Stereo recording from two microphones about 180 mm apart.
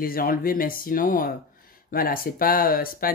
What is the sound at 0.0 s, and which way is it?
Speech, 55° left (ahead or behind).